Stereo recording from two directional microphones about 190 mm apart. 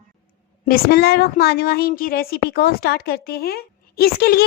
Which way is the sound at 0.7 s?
55° left (ahead or behind).